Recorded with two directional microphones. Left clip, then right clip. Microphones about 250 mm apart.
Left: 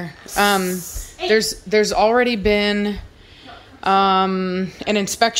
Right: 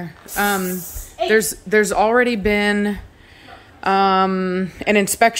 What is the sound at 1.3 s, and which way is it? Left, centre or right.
Speech, centre.